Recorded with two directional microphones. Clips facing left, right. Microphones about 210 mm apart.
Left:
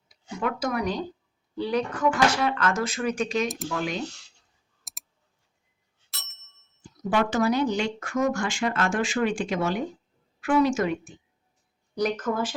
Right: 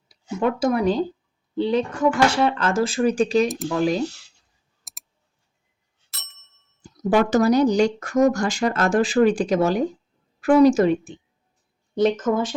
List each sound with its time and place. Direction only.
0.1 s speech: 30° right (ahead or behind)
4.8 s clicking: centre (ahead or behind)
6.1 s ding: centre (ahead or behind)
6.8 s speech: 40° right (ahead or behind)